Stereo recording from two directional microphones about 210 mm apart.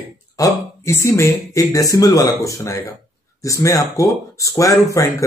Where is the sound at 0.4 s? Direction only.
15° left (ahead or behind).